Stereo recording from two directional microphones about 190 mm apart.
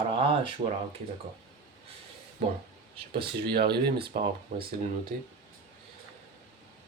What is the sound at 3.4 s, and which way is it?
Speech, 55° right (ahead or behind).